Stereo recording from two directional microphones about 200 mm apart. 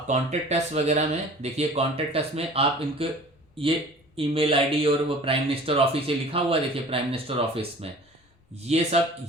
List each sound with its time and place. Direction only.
0.1 s speech: 35° right (ahead or behind)